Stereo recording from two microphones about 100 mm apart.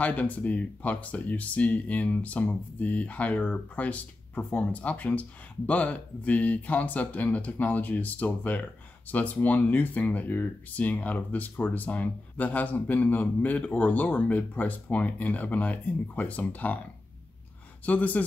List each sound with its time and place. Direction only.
0.0 s speech: 15° left (ahead or behind)
17.8 s speech: 15° left (ahead or behind)